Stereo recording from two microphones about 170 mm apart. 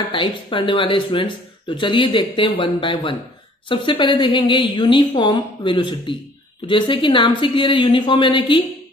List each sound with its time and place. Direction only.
0.1 s a woman's voice: 30° left (ahead or behind)